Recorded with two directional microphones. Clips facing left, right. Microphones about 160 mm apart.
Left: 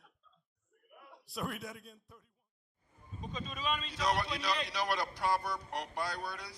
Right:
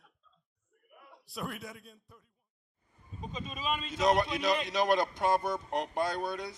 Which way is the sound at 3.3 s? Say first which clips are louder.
Right 2 dB; 20° right (ahead or behind).